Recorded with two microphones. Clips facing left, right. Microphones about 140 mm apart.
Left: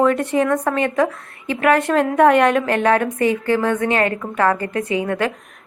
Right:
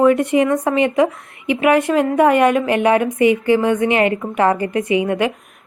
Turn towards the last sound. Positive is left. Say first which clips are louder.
# right 3 dB
turn(degrees=-15)  # may be behind; listen again after turning